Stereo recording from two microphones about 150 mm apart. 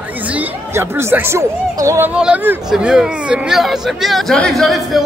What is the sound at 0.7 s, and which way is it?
Speech, 15° right (ahead or behind).